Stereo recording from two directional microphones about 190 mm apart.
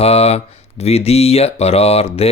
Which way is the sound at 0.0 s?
35° left (ahead or behind).